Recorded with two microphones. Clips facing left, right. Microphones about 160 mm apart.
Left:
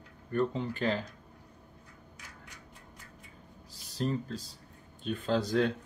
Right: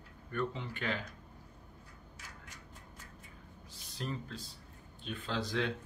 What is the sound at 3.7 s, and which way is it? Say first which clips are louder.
Speech: left 8 dB; 35° left (ahead or behind).